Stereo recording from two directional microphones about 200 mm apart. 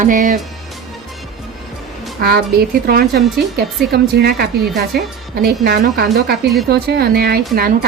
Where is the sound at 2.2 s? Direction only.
50° right (ahead or behind).